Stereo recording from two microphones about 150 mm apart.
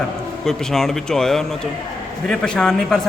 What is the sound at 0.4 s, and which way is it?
A man's voice, centre (ahead or behind).